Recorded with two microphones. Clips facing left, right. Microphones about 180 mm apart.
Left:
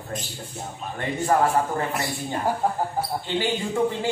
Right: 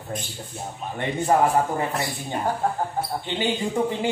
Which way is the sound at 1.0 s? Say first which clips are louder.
Right 1 dB; 20° right (ahead or behind).